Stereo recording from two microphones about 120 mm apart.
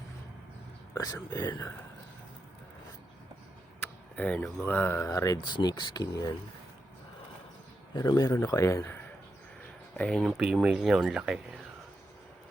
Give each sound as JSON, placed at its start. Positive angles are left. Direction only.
{"t": 0.9, "sound": "speech", "side_deg": 30}
{"t": 3.8, "sound": "speech", "side_deg": 10}
{"t": 5.0, "sound": "speech", "side_deg": 30}
{"t": 7.9, "sound": "a man's voice", "side_deg": 30}
{"t": 10.0, "sound": "speech", "side_deg": 5}
{"t": 10.3, "sound": "speech", "side_deg": -5}